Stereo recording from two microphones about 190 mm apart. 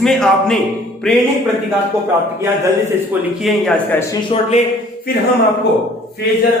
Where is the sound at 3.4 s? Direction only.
Centre (ahead or behind).